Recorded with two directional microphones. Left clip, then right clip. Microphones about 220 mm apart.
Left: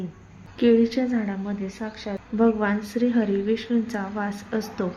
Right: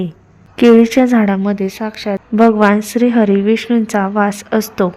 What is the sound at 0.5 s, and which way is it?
A woman's voice, 40° right (ahead or behind).